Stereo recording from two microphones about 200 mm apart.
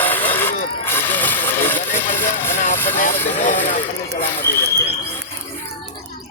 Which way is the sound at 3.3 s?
40° left (ahead or behind).